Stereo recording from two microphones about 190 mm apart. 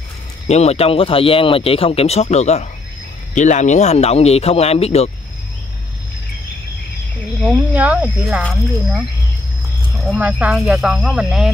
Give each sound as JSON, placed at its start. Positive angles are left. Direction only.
{"t": 0.5, "sound": "speech", "side_deg": 35}
{"t": 7.4, "sound": "speech", "side_deg": -5}
{"t": 10.0, "sound": "speech", "side_deg": -5}